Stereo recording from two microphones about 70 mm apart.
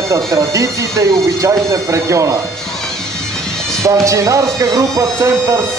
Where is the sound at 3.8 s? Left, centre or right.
Right.